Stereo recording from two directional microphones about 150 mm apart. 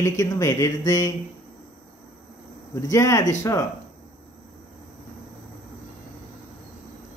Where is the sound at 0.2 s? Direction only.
20° left (ahead or behind).